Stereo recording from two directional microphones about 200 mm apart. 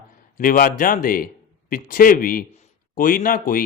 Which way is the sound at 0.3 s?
45° left (ahead or behind).